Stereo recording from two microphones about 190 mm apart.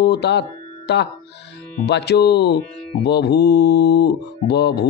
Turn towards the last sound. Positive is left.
turn(degrees=60)  # may be behind; listen again after turning